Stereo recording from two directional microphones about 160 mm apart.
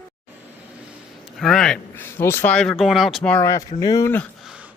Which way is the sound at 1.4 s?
5° left (ahead or behind).